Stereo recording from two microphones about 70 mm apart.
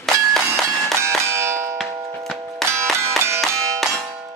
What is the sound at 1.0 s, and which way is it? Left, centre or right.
Clang, right.